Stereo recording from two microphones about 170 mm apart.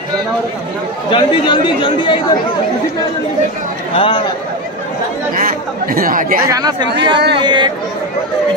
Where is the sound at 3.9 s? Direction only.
30° left (ahead or behind).